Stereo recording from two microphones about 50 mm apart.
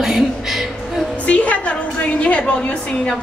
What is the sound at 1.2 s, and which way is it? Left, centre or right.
A woman's voice, left.